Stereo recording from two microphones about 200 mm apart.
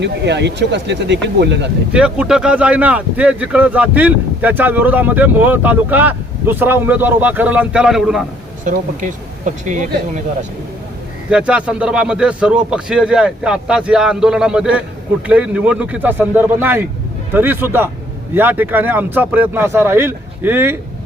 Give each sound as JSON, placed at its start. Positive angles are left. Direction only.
{"t": 0.0, "sound": "speech", "side_deg": -60}
{"t": 1.9, "sound": "speech", "side_deg": -5}
{"t": 8.6, "sound": "speech", "side_deg": -40}
{"t": 11.3, "sound": "a man's voice", "side_deg": -5}